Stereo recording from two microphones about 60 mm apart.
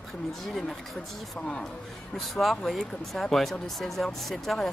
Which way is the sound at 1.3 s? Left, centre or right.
Centre.